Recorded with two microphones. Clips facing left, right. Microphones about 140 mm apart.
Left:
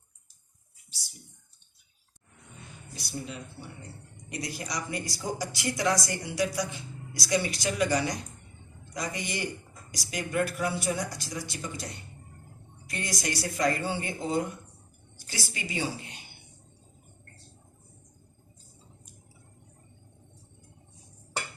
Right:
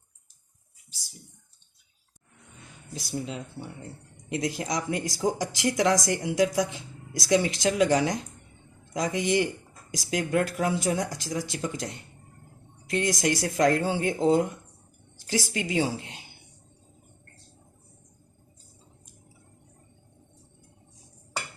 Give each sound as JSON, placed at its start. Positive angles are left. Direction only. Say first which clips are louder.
{"t": 2.9, "sound": "a woman's voice", "louder": "right 5 dB", "side_deg": -90}
{"t": 12.9, "sound": "a woman's voice", "louder": "right 8 dB", "side_deg": -90}